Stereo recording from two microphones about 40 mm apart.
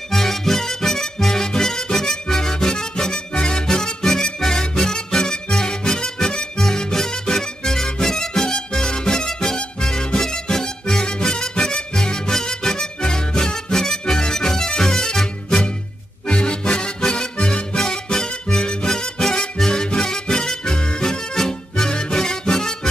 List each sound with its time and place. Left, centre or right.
0.1 s music: centre
16.3 s music: left